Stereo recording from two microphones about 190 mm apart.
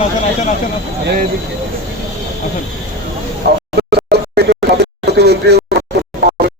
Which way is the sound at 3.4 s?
55° right (ahead or behind).